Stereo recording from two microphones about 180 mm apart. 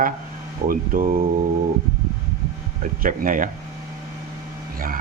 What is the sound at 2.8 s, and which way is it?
Speech, 50° right (ahead or behind).